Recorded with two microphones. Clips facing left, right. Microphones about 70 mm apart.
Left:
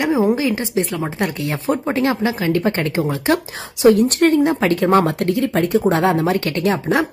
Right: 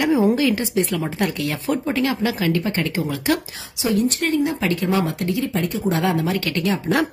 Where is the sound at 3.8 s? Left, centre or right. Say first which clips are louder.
Left 8 dB; left.